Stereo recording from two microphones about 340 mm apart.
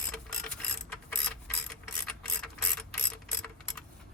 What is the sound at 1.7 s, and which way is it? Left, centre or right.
Ratchet, centre.